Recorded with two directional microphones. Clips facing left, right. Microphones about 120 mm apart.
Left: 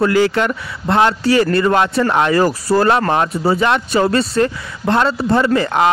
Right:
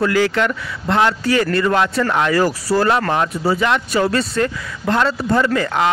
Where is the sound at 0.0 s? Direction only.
25° left (ahead or behind).